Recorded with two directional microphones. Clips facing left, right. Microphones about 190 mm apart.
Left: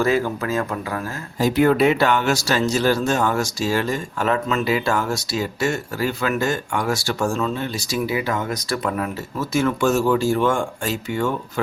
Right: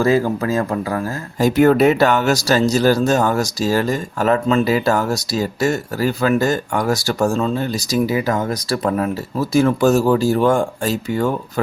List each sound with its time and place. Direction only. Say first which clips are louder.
0.0 s speech: right 4 dB; 35° right (ahead or behind)
1.4 s speech: right 4 dB; 45° right (ahead or behind)